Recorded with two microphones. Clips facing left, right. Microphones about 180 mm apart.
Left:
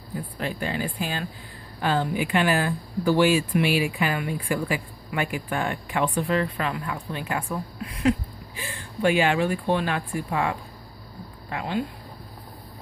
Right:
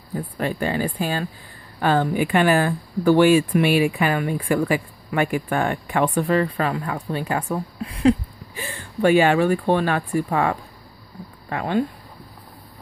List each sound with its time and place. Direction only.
0.4 s speech: 50° right (ahead or behind)
1.8 s a woman's voice: 55° right (ahead or behind); by 8.1 s 30° right (ahead or behind)
8.5 s speech: 45° right (ahead or behind)